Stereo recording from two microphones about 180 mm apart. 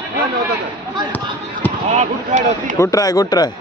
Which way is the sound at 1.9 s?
45° right (ahead or behind).